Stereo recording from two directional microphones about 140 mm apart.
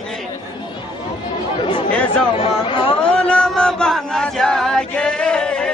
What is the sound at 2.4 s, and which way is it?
Speech, 40° left (ahead or behind).